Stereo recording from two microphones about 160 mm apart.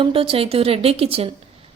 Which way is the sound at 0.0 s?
35° right (ahead or behind).